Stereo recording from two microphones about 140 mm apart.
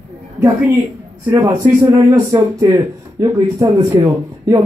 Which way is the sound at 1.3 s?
15° right (ahead or behind).